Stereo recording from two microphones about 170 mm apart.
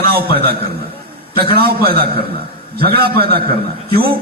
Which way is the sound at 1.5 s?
65° right (ahead or behind).